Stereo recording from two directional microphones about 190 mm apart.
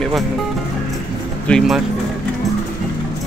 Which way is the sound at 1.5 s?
5° left (ahead or behind).